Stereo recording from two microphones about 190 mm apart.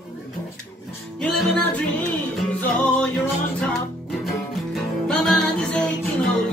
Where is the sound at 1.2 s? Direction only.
5° left (ahead or behind).